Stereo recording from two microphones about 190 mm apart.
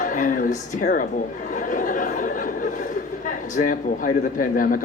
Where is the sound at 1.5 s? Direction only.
45° left (ahead or behind).